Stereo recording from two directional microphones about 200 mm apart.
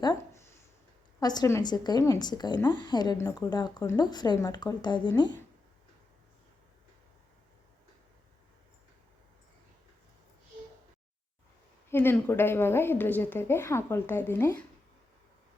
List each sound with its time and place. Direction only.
0.0 s a sound: 15° left (ahead or behind)
1.2 s speech: 20° left (ahead or behind)
11.9 s a woman's voice: 10° left (ahead or behind)